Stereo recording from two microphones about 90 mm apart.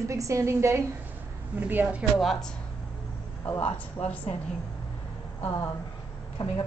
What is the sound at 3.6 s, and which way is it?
Speech, 85° left.